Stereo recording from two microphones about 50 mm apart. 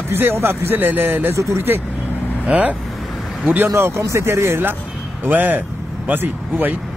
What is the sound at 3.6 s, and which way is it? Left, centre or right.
Speech, right.